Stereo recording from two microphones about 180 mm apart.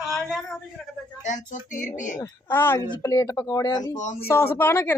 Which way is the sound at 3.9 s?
40° left (ahead or behind).